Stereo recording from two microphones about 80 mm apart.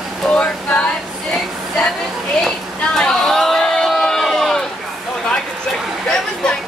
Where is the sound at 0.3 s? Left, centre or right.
Centre.